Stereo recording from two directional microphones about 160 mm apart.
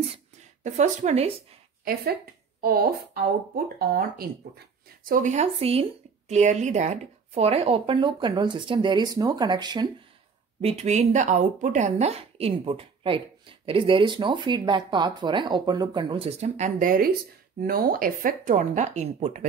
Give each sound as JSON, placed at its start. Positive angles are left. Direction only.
{"t": 0.7, "sound": "speech", "side_deg": -45}
{"t": 2.6, "sound": "speech", "side_deg": -75}
{"t": 10.6, "sound": "a woman's voice", "side_deg": -40}